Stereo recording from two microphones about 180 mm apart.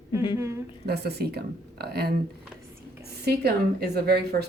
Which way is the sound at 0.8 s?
65° right (ahead or behind).